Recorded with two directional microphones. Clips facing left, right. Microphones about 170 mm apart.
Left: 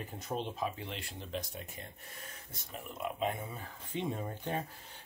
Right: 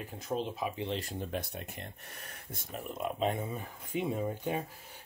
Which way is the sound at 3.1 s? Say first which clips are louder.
Right 3 dB; 30° right (ahead or behind).